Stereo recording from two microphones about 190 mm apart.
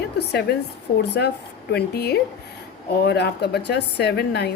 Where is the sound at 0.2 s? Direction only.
60° left (ahead or behind).